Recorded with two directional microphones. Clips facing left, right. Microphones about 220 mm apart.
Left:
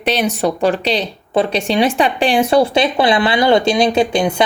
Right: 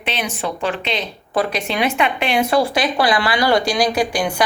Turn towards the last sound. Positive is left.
turn(degrees=25)  # may be behind; listen again after turning